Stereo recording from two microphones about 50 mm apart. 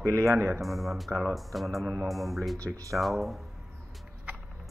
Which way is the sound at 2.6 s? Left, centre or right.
Right.